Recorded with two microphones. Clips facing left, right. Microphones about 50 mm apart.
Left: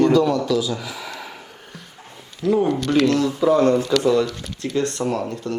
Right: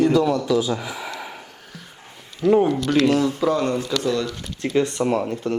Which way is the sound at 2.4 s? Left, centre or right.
Right.